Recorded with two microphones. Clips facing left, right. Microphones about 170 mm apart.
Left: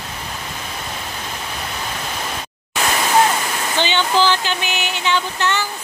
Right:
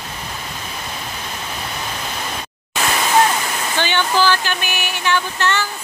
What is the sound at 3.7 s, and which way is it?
Speech, 20° left (ahead or behind).